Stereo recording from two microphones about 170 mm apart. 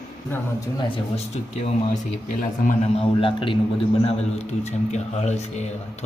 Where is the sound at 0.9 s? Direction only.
40° left (ahead or behind).